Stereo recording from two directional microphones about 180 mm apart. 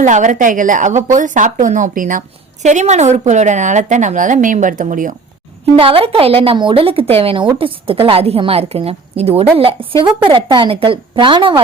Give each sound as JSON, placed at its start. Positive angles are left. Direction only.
{"t": 0.0, "sound": "a woman's voice", "side_deg": -45}
{"t": 5.7, "sound": "a woman's voice", "side_deg": -30}